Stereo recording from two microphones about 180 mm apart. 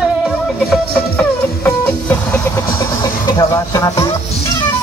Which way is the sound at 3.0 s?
20° left (ahead or behind).